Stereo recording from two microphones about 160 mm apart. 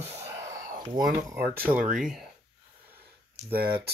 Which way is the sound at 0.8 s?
25° right (ahead or behind).